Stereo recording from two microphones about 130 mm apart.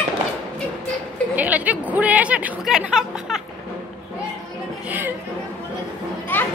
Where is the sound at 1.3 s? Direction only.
10° right (ahead or behind).